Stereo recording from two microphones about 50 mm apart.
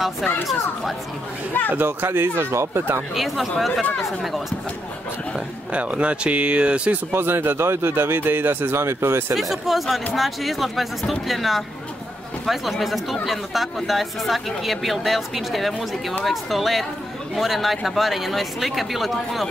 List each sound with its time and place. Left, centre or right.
1.7 s speech: right
3.2 s speech: centre
5.7 s speech: right
7.1 s speech: right
9.3 s speech: centre